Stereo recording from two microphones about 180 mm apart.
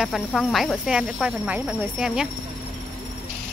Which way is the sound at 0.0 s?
Centre (ahead or behind).